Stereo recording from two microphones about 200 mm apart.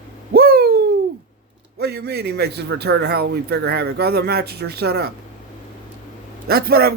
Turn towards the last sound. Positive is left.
turn(degrees=-50)  # may be behind; listen again after turning